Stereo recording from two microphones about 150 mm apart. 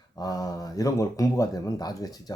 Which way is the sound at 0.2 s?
25° left (ahead or behind).